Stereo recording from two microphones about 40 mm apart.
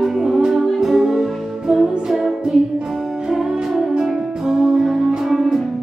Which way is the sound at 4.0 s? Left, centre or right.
Centre.